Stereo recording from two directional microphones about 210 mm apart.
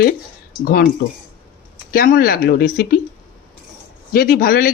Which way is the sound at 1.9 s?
45° left (ahead or behind).